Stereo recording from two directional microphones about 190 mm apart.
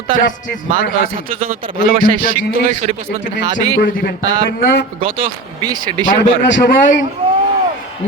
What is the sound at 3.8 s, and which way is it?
Speech, 55° left (ahead or behind).